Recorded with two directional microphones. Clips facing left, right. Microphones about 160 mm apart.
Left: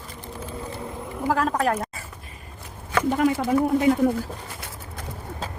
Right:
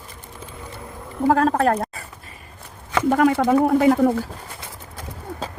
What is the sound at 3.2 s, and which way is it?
Speech, 80° right.